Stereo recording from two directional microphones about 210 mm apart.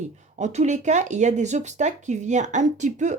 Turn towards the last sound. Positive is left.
turn(degrees=-35)  # may be behind; listen again after turning